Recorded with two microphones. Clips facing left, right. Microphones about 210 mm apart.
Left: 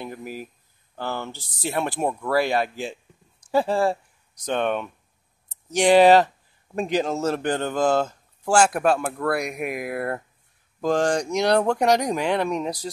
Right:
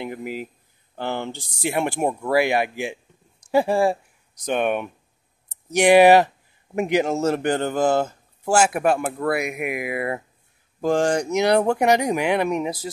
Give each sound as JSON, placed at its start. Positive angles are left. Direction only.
{"t": 0.0, "sound": "speech", "side_deg": -20}